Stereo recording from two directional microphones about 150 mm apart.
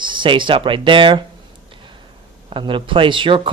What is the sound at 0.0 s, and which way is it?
Speech, 30° right (ahead or behind).